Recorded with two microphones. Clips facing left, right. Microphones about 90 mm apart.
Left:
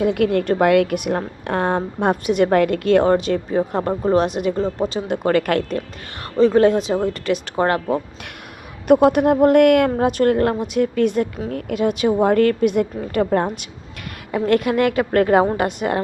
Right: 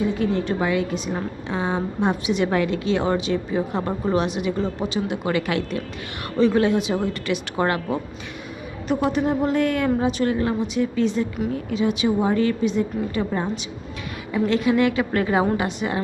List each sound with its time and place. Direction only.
0.0 s a woman's voice: 65° left (ahead or behind); by 5.8 s 50° left (ahead or behind)
6.3 s speech: 35° left (ahead or behind)
9.0 s a woman's voice: 60° left (ahead or behind)